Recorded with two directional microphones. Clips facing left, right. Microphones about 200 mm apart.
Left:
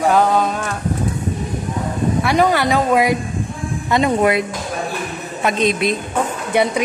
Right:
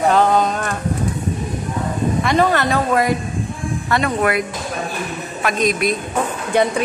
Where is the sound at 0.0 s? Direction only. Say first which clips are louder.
Even; 5° left (ahead or behind).